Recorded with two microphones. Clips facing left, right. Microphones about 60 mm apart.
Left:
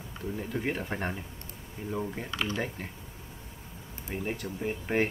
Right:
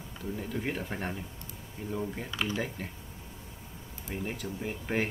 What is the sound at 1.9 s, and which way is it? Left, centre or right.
Speech, centre.